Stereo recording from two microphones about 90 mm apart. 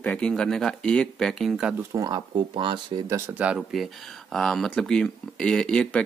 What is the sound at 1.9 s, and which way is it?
Speech, 40° right (ahead or behind).